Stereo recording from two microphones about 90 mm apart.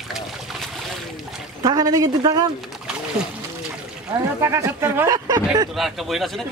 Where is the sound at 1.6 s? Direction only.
45° right (ahead or behind).